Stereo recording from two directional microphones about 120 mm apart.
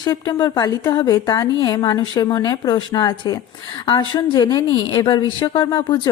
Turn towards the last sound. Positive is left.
turn(degrees=40)  # may be behind; listen again after turning